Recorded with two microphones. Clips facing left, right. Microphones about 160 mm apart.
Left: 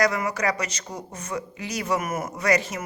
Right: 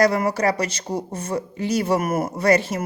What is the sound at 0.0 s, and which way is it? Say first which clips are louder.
Speech: right 5 dB; 30° right (ahead or behind).